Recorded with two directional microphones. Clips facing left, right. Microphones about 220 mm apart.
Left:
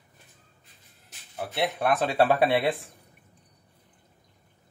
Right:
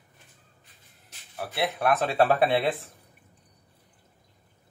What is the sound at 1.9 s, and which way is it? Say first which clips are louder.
Speech: even; 15° left (ahead or behind).